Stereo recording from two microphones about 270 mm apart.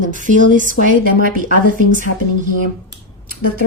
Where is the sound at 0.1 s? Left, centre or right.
Right.